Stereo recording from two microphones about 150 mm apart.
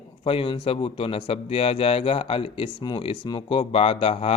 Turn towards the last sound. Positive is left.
turn(degrees=40)  # may be behind; listen again after turning